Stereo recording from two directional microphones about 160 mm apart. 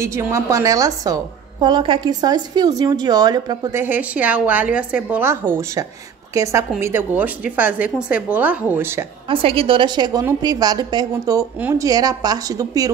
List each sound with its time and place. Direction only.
0.0 s a woman's voice: 15° right (ahead or behind)
3.8 s a woman's voice: 10° right (ahead or behind)
9.3 s a woman's voice: 35° right (ahead or behind)